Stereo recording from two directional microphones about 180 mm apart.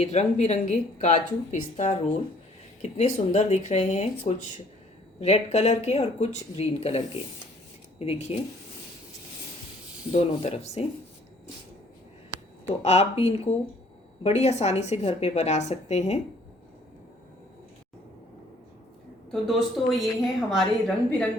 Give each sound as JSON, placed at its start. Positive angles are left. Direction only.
{"t": 0.0, "sound": "speech", "side_deg": 40}
{"t": 10.1, "sound": "speech", "side_deg": 35}
{"t": 12.6, "sound": "speech", "side_deg": 35}
{"t": 19.3, "sound": "speech", "side_deg": 0}